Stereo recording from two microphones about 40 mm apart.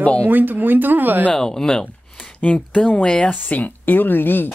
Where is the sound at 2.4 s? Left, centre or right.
Left.